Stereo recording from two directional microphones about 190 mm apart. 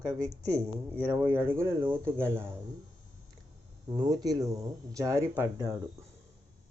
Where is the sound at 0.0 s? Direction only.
15° right (ahead or behind).